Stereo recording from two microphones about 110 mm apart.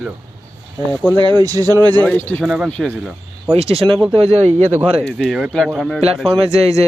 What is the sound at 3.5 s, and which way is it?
Speech, 60° right (ahead or behind).